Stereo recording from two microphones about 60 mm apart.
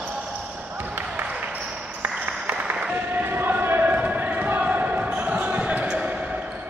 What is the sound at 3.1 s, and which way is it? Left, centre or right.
Basketball bounce, right.